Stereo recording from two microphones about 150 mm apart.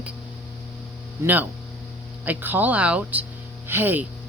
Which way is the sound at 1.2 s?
10° right (ahead or behind).